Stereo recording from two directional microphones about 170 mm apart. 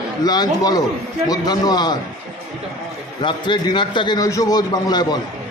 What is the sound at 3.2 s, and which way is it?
A man's voice, 25° left (ahead or behind).